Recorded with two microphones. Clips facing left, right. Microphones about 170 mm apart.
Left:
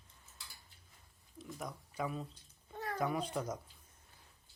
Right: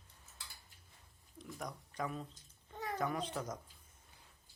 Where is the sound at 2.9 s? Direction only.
10° left (ahead or behind).